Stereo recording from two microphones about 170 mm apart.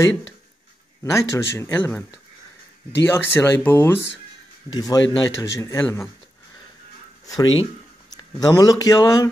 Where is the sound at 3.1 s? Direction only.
10° left (ahead or behind).